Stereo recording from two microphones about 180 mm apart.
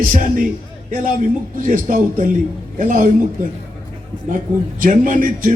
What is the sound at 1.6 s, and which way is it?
A man's voice, 45° right (ahead or behind).